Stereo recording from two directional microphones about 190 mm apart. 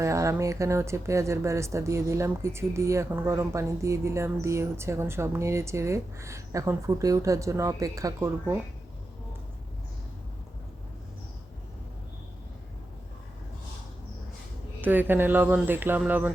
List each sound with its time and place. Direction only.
0.0 s speech: 15° right (ahead or behind)
14.8 s speech: 10° right (ahead or behind)